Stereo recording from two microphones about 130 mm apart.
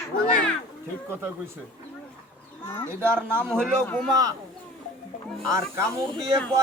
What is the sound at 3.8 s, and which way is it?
Speech, 5° left (ahead or behind).